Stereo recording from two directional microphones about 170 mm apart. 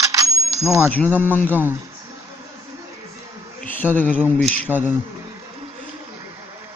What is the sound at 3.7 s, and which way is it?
Speech, 10° left (ahead or behind).